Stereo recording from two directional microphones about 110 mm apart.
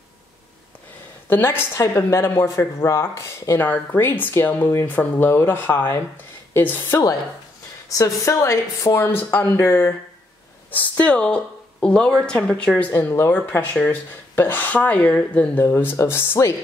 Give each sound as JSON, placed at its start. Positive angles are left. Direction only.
{"t": 1.3, "sound": "a woman's voice", "side_deg": 20}
{"t": 12.9, "sound": "a woman's voice", "side_deg": 25}
{"t": 15.6, "sound": "speech", "side_deg": 20}